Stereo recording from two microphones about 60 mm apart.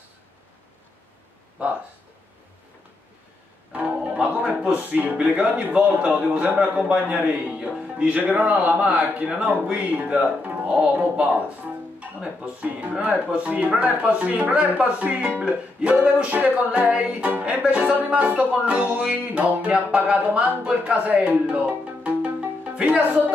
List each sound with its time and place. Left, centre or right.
3.7 s music: right
4.7 s a man's voice: right